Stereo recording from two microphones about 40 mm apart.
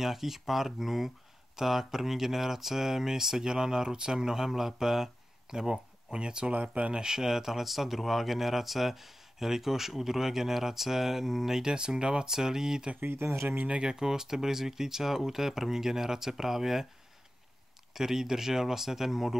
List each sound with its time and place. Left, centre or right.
0.0 s speech: centre
6.5 s speech: right
6.9 s speech: centre
11.7 s speech: right
12.3 s speech: centre
13.0 s speech: right
13.8 s speech: centre
17.9 s speech: centre